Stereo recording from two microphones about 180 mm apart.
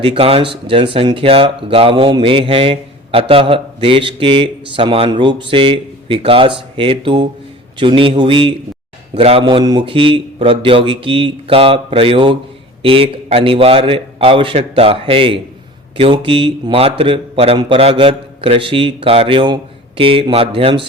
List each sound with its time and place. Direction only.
0.0 s speech: 30° right (ahead or behind)